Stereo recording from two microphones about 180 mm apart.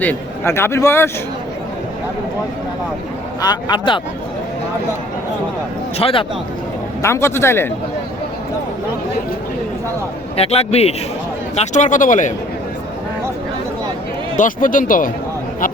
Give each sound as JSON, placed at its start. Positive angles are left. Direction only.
{"t": 0.0, "sound": "a man's voice", "side_deg": 10}
{"t": 3.4, "sound": "speech", "side_deg": 25}
{"t": 6.0, "sound": "a man's voice", "side_deg": 30}
{"t": 7.0, "sound": "a man's voice", "side_deg": 15}
{"t": 10.3, "sound": "a man's voice", "side_deg": 35}
{"t": 14.3, "sound": "speech", "side_deg": 45}